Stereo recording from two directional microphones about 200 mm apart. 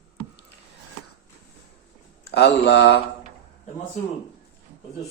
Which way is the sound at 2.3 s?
55° left (ahead or behind).